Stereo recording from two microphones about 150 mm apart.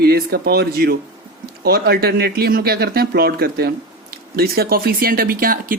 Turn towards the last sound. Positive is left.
turn(degrees=-75)  # may be behind; listen again after turning